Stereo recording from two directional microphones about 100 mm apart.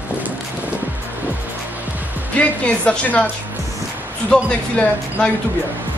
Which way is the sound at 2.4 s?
15° left (ahead or behind).